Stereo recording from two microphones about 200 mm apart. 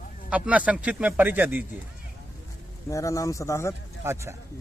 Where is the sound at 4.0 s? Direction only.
15° right (ahead or behind).